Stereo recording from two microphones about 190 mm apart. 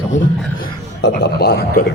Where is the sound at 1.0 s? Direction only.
60° left (ahead or behind).